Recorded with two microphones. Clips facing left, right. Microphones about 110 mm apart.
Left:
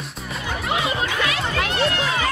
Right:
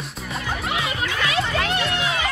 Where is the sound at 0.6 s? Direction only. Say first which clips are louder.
Left 5 dB; 30° left (ahead or behind).